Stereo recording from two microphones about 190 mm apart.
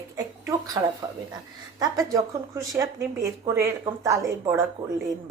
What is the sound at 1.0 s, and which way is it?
Speech, 15° right (ahead or behind).